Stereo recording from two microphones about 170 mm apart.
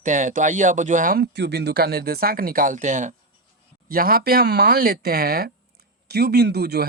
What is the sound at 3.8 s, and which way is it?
Speech, 60° right (ahead or behind).